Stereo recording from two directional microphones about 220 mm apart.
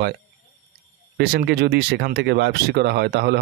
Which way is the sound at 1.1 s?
50° right (ahead or behind).